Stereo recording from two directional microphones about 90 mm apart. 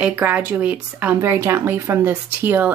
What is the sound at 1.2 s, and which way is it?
Speech, 30° right (ahead or behind).